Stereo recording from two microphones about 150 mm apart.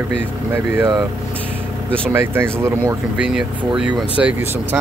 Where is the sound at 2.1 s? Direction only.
15° right (ahead or behind).